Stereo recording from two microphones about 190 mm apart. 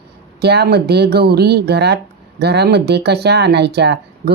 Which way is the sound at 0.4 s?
60° right (ahead or behind).